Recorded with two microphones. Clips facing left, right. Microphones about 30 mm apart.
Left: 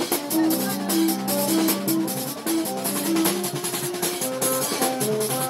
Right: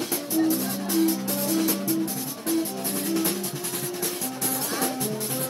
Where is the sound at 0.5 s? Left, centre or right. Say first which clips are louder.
Left 2 dB; left.